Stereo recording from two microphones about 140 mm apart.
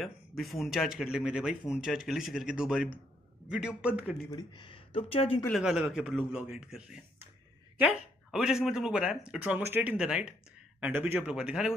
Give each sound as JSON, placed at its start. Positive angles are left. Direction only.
{"t": 0.4, "sound": "a man's voice", "side_deg": 0}
{"t": 4.3, "sound": "speech", "side_deg": 30}
{"t": 5.5, "sound": "a man's voice", "side_deg": -5}